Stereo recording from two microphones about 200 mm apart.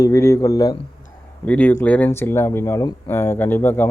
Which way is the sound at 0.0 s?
15° left (ahead or behind).